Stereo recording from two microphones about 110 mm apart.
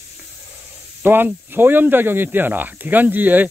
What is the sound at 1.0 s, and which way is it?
Speech, 20° right (ahead or behind).